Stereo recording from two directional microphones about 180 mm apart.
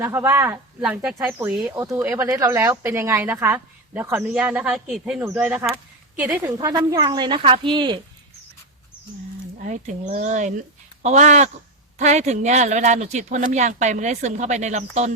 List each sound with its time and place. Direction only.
0.0 s speech: 10° right (ahead or behind)
1.7 s a woman's voice: 15° right (ahead or behind)
9.6 s speech: 45° right (ahead or behind)